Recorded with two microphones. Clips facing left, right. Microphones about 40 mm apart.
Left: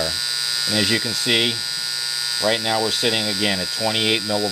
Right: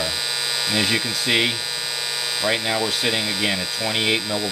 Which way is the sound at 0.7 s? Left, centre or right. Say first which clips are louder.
Left 1 dB; centre.